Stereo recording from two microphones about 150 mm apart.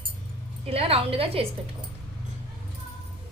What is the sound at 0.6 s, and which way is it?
Speech, 40° right (ahead or behind).